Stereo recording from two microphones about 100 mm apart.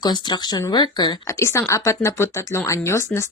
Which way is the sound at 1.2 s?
30° left (ahead or behind).